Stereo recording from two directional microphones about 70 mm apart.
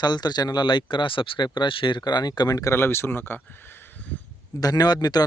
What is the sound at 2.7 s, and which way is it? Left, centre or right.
Speech, left.